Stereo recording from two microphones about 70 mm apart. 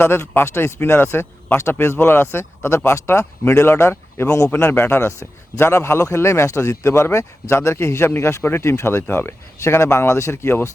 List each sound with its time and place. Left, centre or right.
0.0 s a man's voice: left